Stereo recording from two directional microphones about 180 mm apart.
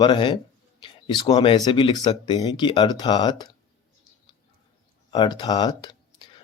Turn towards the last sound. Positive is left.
turn(degrees=25)  # may be behind; listen again after turning